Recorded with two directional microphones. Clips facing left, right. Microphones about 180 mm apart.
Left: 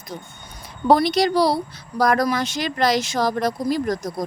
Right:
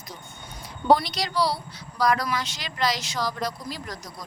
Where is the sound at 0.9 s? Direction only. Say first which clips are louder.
Left 5 dB; 55° left (ahead or behind).